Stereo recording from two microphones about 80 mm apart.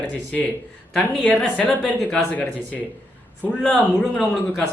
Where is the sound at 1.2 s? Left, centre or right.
Centre.